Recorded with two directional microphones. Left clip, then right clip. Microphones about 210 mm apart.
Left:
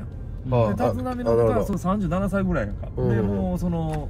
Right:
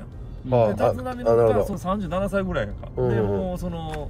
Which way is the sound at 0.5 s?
45° right (ahead or behind).